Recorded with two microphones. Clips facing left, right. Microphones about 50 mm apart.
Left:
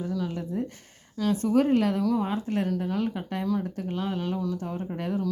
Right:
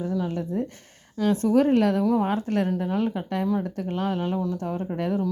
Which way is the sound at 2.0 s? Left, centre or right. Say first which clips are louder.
Right 3 dB; right.